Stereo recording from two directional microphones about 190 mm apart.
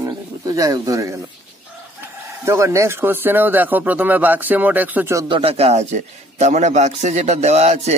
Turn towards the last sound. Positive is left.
turn(degrees=-35)  # may be behind; listen again after turning